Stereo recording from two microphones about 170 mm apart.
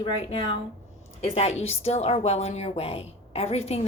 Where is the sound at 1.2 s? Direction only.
40° left (ahead or behind).